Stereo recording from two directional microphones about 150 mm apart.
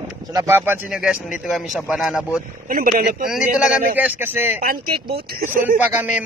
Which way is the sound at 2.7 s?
70° right (ahead or behind).